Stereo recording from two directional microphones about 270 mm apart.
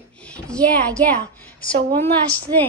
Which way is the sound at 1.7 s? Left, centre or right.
Right.